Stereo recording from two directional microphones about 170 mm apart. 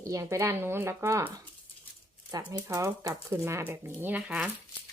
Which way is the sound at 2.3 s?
20° right (ahead or behind).